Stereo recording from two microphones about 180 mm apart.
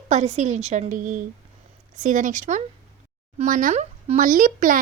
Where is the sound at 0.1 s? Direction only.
40° right (ahead or behind).